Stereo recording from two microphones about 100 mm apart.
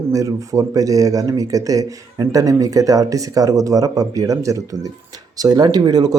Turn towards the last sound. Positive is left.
turn(degrees=-40)  # may be behind; listen again after turning